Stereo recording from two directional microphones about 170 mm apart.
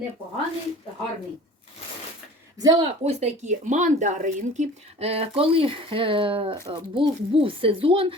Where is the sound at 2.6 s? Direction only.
25° right (ahead or behind).